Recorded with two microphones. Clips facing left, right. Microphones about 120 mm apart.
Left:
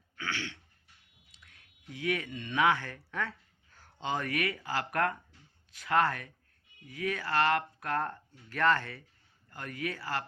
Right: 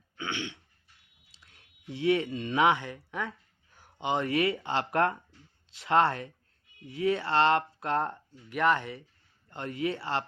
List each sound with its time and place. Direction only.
0.2 s dog: 20° right (ahead or behind)
1.3 s speech: 30° right (ahead or behind)